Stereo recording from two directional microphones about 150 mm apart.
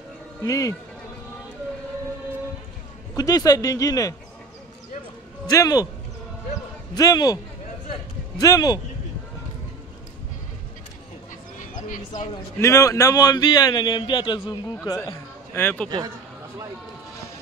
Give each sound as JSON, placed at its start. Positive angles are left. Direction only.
{"t": 0.4, "sound": "speech", "side_deg": 20}
{"t": 3.2, "sound": "speech", "side_deg": 25}
{"t": 5.5, "sound": "speech", "side_deg": 25}
{"t": 6.9, "sound": "speech", "side_deg": 25}
{"t": 8.4, "sound": "speech", "side_deg": 25}
{"t": 11.7, "sound": "speech", "side_deg": 55}
{"t": 12.5, "sound": "speech", "side_deg": 20}
{"t": 15.5, "sound": "speech", "side_deg": 10}